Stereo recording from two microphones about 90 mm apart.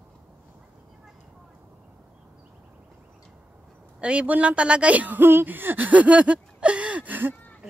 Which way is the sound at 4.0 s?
10° right (ahead or behind).